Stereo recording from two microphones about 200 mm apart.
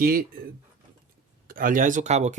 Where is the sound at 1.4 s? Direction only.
45° right (ahead or behind).